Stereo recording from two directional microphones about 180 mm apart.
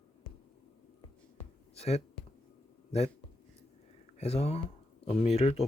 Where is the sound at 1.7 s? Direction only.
35° left (ahead or behind).